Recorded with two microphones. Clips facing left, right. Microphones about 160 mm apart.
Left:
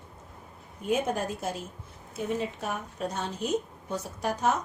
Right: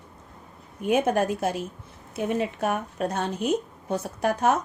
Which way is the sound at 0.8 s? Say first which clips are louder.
Right 6 dB; 65° right (ahead or behind).